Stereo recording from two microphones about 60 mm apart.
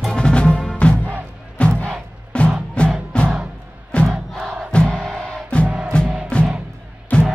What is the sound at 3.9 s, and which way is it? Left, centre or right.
Crowd, left.